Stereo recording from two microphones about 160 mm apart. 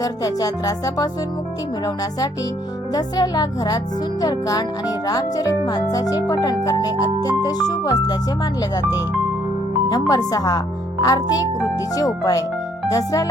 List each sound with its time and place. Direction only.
0.0 s speech: 25° left (ahead or behind)
2.9 s speech: 25° left (ahead or behind)
10.1 s speech: 25° left (ahead or behind)